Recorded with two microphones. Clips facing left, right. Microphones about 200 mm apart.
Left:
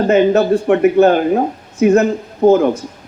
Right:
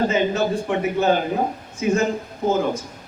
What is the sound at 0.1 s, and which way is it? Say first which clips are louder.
Speech: left 9 dB; 65° left (ahead or behind).